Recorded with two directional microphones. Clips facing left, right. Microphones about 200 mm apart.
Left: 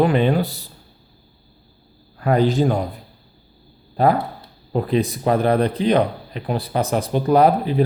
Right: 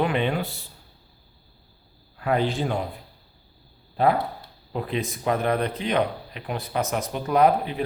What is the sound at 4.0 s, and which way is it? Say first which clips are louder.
Speech: left 4 dB; 40° left (ahead or behind).